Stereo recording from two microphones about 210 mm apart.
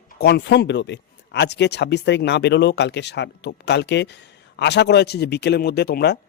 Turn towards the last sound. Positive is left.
turn(degrees=50)  # may be behind; listen again after turning